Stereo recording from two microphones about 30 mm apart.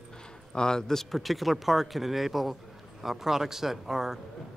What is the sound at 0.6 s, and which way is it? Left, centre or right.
Speech, left.